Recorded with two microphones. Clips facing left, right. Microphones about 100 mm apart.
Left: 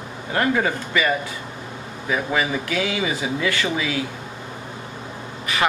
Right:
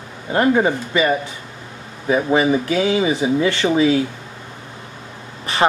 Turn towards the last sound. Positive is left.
turn(degrees=-30)  # may be behind; listen again after turning